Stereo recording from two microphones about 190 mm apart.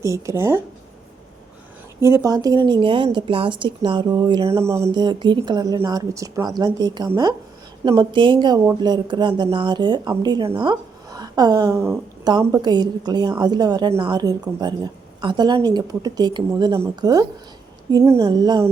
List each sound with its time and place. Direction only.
0.0 s speech: 15° right (ahead or behind)
2.0 s a woman's voice: 15° right (ahead or behind)